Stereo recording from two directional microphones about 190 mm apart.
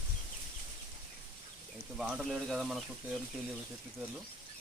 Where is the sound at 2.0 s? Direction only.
Centre (ahead or behind).